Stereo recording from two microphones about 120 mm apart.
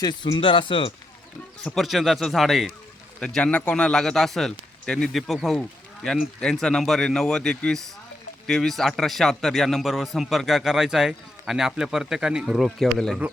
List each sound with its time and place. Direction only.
0.0 s speech: 35° left (ahead or behind)
1.7 s a man's voice: centre (ahead or behind)